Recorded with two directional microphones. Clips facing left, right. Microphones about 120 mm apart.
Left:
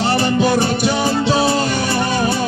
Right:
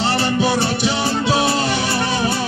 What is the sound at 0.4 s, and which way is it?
Music, 50° left (ahead or behind).